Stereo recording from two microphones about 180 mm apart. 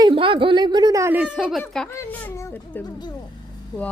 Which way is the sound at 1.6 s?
5° left (ahead or behind).